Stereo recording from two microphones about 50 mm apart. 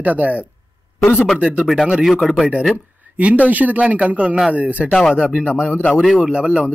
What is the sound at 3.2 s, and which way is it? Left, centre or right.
Speech, right.